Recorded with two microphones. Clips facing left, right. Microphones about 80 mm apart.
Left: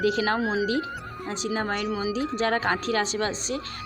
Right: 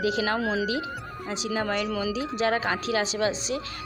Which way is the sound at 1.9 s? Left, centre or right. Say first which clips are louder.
Left 1 dB; left.